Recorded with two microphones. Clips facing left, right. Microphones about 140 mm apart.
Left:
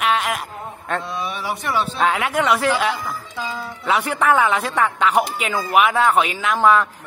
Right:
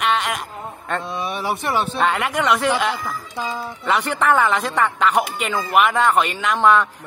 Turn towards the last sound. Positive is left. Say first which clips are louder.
# even
turn(degrees=0)  # may be behind; listen again after turning